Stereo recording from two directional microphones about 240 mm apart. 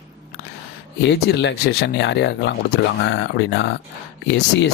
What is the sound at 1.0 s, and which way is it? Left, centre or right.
Speech, left.